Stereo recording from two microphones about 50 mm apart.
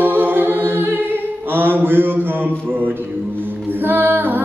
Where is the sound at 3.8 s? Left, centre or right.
Right.